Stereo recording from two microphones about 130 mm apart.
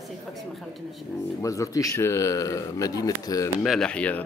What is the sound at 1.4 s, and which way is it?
Speech, 25° left (ahead or behind).